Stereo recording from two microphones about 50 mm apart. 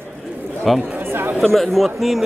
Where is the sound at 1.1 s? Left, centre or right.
Right.